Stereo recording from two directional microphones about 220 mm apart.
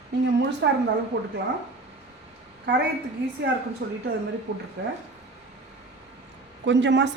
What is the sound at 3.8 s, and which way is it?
Speech, 45° right (ahead or behind).